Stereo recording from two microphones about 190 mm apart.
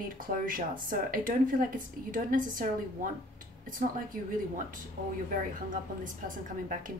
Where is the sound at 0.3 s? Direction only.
45° right (ahead or behind).